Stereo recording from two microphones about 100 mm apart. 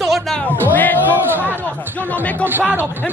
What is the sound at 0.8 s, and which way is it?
Speech, 20° left (ahead or behind).